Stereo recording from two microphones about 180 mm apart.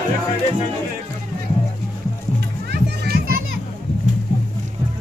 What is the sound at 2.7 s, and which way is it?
Children playing, 60° right (ahead or behind).